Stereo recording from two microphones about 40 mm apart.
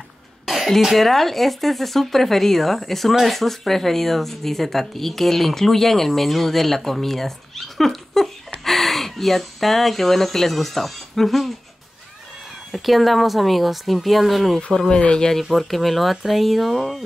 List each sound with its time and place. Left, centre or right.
0.5 s speech: centre
12.7 s speech: centre
14.7 s speech: centre
15.0 s speech: left
15.5 s speech: centre